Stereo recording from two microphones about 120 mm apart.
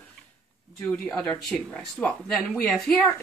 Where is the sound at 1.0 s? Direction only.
10° left (ahead or behind).